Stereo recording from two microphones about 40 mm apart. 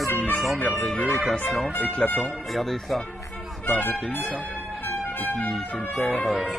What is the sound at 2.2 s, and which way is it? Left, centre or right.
Music, centre.